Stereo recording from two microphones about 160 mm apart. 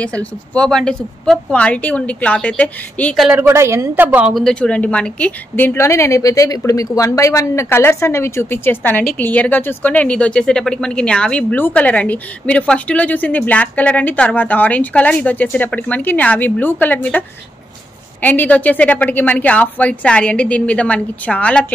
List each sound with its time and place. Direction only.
0.0 s speech: 5° left (ahead or behind)
3.3 s speech: 15° right (ahead or behind)
4.3 s speech: centre (ahead or behind)
18.2 s speech: 10° left (ahead or behind)